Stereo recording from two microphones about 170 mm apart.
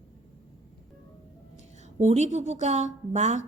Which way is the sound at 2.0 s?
40° right (ahead or behind).